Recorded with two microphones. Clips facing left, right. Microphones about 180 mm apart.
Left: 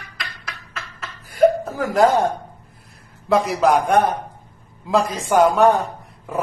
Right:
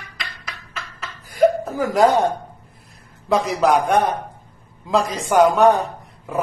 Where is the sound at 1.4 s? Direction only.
Centre (ahead or behind).